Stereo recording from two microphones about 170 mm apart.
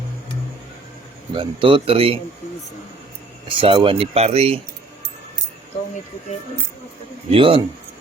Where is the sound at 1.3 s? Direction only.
30° right (ahead or behind).